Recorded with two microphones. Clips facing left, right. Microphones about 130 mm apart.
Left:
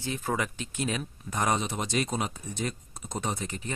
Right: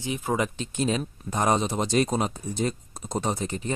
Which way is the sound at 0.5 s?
30° right (ahead or behind).